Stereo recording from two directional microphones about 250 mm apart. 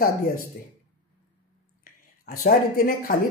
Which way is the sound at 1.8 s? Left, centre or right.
Left.